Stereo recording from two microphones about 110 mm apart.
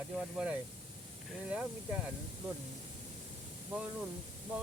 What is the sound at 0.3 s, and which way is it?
Speech, 10° right (ahead or behind).